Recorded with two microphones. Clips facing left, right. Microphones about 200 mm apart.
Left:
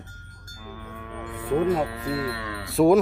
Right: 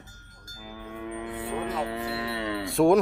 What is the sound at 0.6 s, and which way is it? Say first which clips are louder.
Music: right 3 dB; 15° right (ahead or behind).